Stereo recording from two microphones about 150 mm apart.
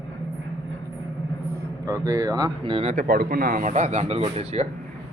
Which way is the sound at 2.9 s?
65° right (ahead or behind).